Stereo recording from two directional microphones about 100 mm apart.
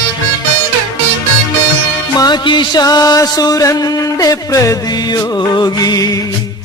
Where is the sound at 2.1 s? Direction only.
45° left (ahead or behind).